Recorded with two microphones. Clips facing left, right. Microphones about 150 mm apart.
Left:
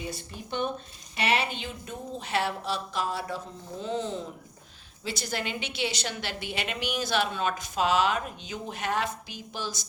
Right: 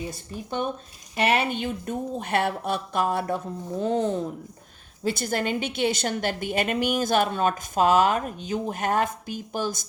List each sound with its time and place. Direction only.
1.1 s a woman's voice: 50° right (ahead or behind)